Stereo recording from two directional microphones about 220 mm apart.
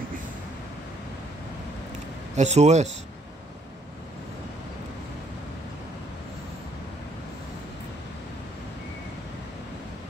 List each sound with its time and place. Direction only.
2.3 s speech: 30° right (ahead or behind)